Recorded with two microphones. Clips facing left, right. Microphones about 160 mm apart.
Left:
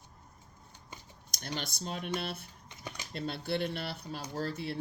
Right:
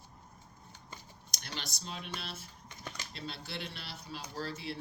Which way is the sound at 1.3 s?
50° left (ahead or behind).